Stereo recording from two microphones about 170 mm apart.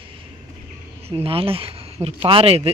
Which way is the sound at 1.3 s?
35° right (ahead or behind).